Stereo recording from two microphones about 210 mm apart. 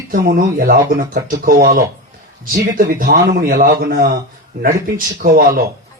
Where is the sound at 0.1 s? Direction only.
40° right (ahead or behind).